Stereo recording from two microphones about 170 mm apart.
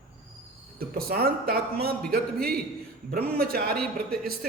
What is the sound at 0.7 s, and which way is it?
A man's voice, 60° right (ahead or behind).